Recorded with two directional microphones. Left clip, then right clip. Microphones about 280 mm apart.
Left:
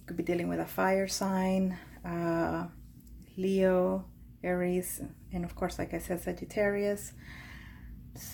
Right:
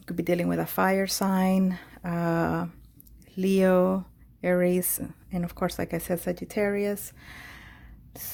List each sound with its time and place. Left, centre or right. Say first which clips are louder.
0.0 s speech: right 6 dB; right